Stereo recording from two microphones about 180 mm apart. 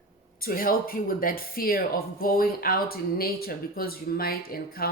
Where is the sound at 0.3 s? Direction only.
55° left (ahead or behind).